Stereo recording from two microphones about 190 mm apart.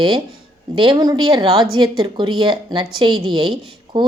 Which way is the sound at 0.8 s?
25° right (ahead or behind).